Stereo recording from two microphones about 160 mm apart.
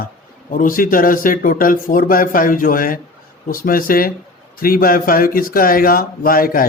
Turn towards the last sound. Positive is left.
turn(degrees=65)  # may be behind; listen again after turning